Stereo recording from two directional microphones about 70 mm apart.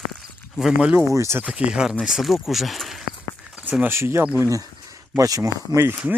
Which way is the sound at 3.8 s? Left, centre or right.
Right.